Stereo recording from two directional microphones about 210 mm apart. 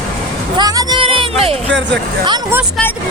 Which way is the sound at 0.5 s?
20° right (ahead or behind).